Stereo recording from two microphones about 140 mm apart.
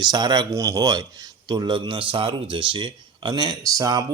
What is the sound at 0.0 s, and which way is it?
Speech, 30° right (ahead or behind).